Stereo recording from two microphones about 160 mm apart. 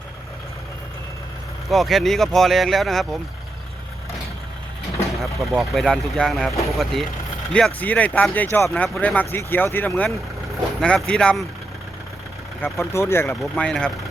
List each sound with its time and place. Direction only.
1.7 s speech: centre (ahead or behind)
5.2 s speech: centre (ahead or behind)
12.6 s speech: 15° left (ahead or behind)
13.2 s speech: 5° left (ahead or behind)